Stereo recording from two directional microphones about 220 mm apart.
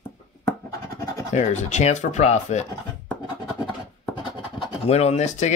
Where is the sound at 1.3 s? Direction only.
30° left (ahead or behind).